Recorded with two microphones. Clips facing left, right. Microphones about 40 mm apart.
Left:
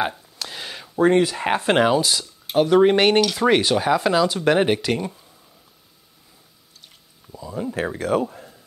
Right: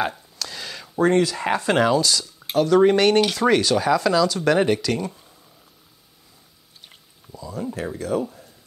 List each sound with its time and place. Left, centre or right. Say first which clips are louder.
0.4 s a sound: even; left
1.0 s speech: left 1 dB; centre
7.3 s speech: left 2 dB; left
7.7 s speech: left 4 dB; left